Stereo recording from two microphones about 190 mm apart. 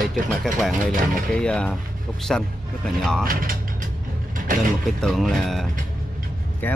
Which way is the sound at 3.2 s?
50° right (ahead or behind).